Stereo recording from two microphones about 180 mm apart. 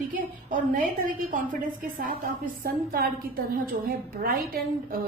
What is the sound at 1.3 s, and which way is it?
A woman's voice, 50° right (ahead or behind).